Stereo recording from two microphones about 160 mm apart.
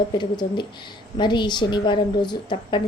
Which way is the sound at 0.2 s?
30° left (ahead or behind).